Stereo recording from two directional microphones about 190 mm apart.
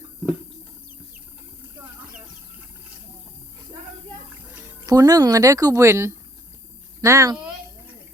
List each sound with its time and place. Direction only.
4.8 s speech: 20° right (ahead or behind)